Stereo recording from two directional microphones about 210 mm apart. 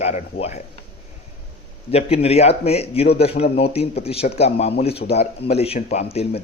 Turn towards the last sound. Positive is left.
turn(degrees=30)  # may be behind; listen again after turning